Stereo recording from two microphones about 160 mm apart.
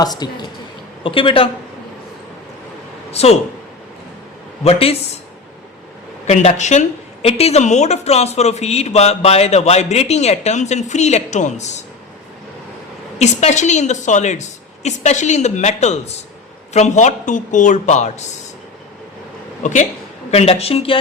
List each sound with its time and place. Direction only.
0.0 s a woman's voice: 25° left (ahead or behind)
3.1 s speech: 40° left (ahead or behind)
4.6 s a woman's voice: 40° left (ahead or behind)
6.2 s a woman's voice: 45° left (ahead or behind)
13.1 s a woman's voice: 45° left (ahead or behind)
19.6 s a woman's voice: 50° left (ahead or behind)
20.3 s a woman's voice: 40° left (ahead or behind)